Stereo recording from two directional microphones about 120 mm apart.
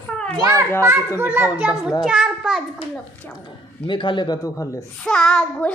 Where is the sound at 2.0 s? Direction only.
5° right (ahead or behind).